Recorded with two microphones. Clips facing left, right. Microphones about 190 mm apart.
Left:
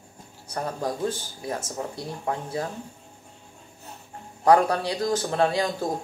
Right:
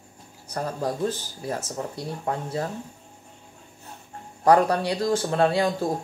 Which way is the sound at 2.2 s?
35° right (ahead or behind).